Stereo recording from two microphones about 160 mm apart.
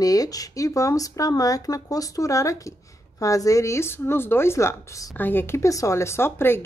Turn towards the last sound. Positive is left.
turn(degrees=15)  # may be behind; listen again after turning